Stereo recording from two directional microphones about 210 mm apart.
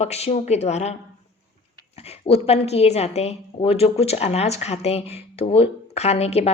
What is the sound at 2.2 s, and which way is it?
A woman's voice, 30° left (ahead or behind).